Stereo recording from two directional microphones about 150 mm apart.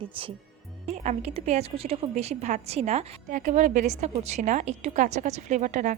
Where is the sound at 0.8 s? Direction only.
45° right (ahead or behind).